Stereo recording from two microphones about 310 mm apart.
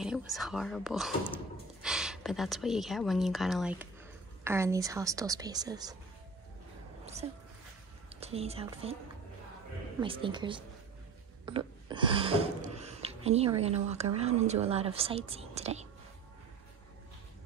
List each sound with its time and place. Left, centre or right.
0.0 s a woman's voice: centre
7.2 s a woman's voice: centre
9.9 s a woman's voice: centre